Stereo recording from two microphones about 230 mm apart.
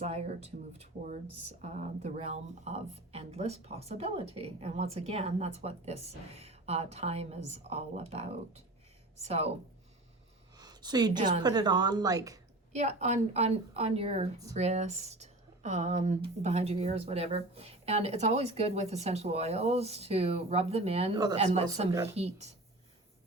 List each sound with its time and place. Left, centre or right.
0.0 s speech: right
10.6 s a sound: centre
11.3 s a woman's voice: centre
12.7 s speech: right